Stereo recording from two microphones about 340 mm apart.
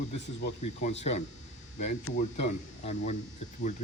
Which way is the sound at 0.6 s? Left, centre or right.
Centre.